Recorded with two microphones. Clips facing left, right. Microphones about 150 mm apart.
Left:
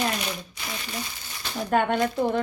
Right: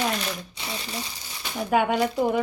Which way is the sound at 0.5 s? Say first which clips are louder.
Right 1 dB; 30° right (ahead or behind).